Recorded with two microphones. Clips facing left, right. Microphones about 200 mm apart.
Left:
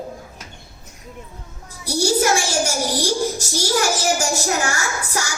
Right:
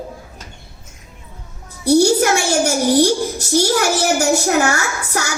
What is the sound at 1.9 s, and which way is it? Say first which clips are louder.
A child's voice: right 6 dB; 60° right (ahead or behind).